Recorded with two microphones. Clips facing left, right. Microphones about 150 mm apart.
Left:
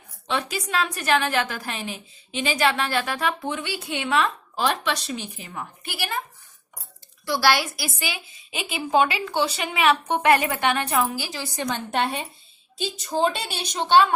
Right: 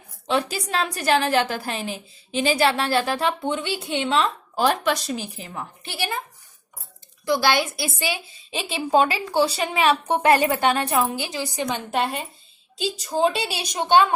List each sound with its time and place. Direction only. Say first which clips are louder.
0.3 s a woman's voice: right 3 dB; 40° right (ahead or behind)
4.5 s a woman's voice: right 5 dB; 45° right (ahead or behind); by 6.0 s 25° right (ahead or behind)
7.3 s a woman's voice: right 1 dB; 20° right (ahead or behind)
11.6 s a woman's voice: even; 5° right (ahead or behind)